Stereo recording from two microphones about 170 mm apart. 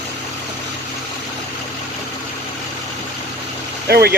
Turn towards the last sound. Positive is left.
turn(degrees=-65)  # may be behind; listen again after turning